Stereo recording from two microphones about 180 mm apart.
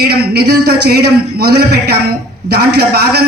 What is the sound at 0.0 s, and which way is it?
A man's voice, 60° right (ahead or behind).